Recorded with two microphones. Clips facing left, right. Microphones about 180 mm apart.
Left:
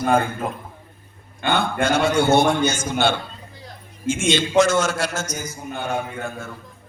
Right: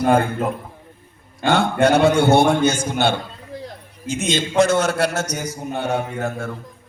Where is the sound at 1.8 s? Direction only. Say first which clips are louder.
Right 6 dB; 65° right (ahead or behind).